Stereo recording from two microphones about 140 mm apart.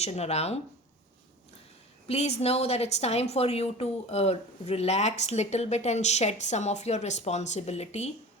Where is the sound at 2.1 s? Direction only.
45° left (ahead or behind).